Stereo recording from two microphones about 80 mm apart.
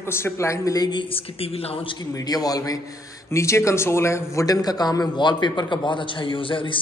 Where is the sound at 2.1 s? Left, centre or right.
Left.